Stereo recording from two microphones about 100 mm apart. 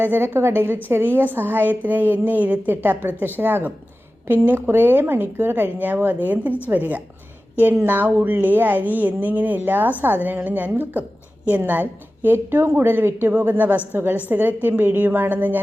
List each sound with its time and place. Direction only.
0.0 s a woman's voice: 20° right (ahead or behind)